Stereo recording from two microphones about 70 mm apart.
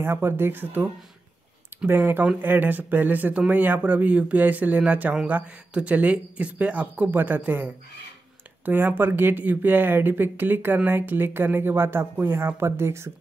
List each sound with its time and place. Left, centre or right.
0.0 s speech: right
1.9 s speech: right